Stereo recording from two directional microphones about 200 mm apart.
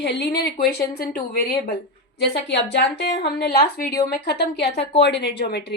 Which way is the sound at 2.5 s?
60° left (ahead or behind).